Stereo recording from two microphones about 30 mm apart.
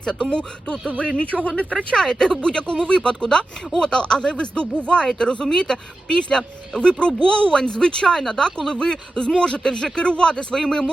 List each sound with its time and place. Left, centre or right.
0.0 s speech: left
1.7 s speech: left
2.4 s speech: left
5.2 s speech: left
7.2 s speech: left
8.0 s speech: centre
10.0 s speech: left
10.5 s a man's voice: centre